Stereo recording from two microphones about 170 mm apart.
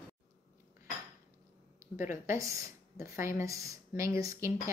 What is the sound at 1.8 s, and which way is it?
A woman's voice, 15° right (ahead or behind).